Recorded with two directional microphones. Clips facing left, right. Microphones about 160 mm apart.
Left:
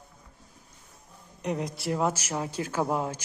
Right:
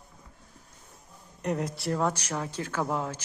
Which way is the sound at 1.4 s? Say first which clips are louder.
Even; 5° left (ahead or behind).